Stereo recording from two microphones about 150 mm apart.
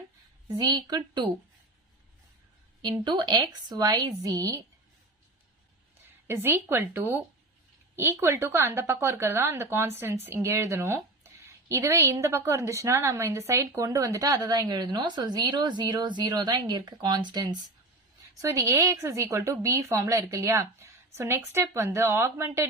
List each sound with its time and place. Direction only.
0.4 s a woman's voice: 30° right (ahead or behind)
3.0 s a woman's voice: 30° right (ahead or behind)
6.2 s a woman's voice: 15° right (ahead or behind)